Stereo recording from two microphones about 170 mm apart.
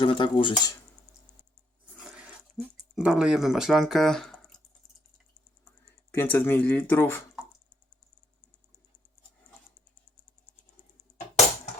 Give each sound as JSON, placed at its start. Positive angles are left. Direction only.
{"t": 0.0, "sound": "speech", "side_deg": 30}
{"t": 2.0, "sound": "a sound", "side_deg": -5}
{"t": 6.1, "sound": "speech", "side_deg": 10}